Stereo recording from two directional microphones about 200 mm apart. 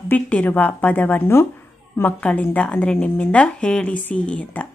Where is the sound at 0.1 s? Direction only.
10° left (ahead or behind).